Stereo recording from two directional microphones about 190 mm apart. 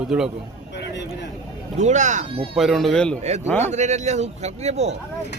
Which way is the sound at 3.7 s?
35° right (ahead or behind).